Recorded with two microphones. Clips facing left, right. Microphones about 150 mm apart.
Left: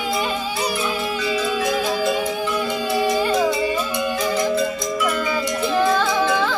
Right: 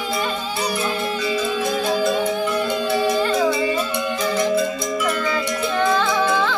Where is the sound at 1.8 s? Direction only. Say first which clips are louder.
Right 1 dB; 5° left (ahead or behind).